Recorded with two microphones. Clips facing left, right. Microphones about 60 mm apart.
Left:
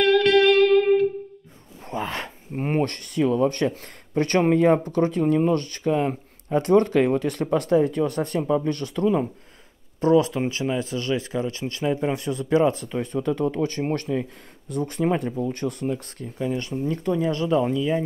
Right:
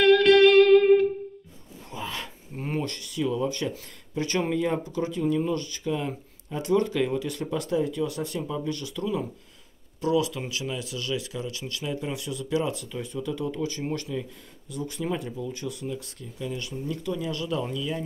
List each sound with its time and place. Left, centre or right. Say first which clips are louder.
0.0 s music: right 1 dB; centre
1.9 s speech: left 6 dB; left